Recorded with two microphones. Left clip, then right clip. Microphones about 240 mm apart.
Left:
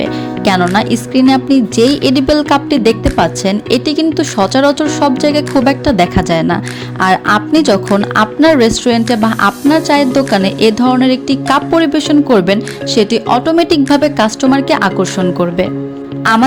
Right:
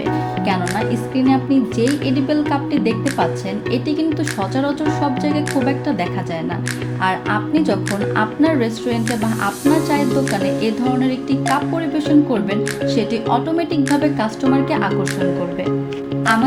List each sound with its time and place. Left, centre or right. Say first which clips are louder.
0.8 s speech: left 8 dB; left